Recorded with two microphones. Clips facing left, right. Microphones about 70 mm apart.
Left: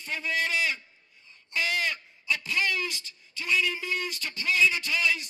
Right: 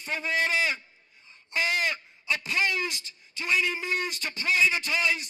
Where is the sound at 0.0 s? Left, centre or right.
Right.